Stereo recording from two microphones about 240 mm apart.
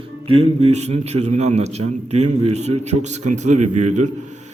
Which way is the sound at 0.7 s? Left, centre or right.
Right.